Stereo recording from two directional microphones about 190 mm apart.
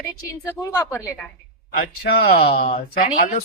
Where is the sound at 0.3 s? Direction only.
15° left (ahead or behind).